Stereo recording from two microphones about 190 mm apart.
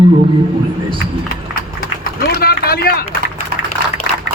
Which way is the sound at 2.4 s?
55° left (ahead or behind).